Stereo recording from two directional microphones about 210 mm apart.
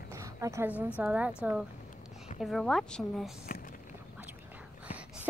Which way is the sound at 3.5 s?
40° left (ahead or behind).